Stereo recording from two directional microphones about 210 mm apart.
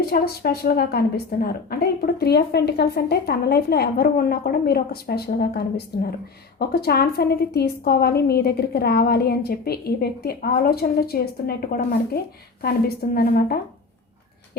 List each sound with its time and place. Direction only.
0.1 s a woman's voice: 45° left (ahead or behind)